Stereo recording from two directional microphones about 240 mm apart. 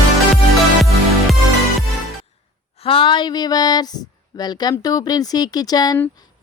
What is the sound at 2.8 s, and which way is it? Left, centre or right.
Speech, left.